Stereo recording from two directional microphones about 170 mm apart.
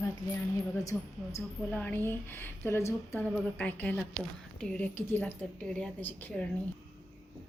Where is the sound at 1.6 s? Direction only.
5° left (ahead or behind).